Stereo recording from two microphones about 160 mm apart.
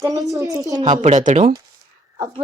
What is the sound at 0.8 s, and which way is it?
Speech, 45° right (ahead or behind).